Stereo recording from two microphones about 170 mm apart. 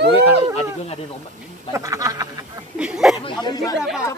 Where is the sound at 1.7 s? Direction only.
20° right (ahead or behind).